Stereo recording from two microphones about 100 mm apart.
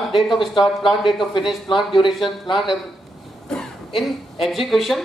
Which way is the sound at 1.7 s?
55° left (ahead or behind).